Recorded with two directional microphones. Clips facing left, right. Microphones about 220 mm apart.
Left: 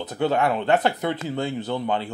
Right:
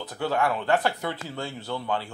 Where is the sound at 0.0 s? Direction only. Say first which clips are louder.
Left 4 dB; 20° left (ahead or behind).